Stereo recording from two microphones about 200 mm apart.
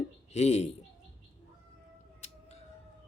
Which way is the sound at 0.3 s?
35° left (ahead or behind).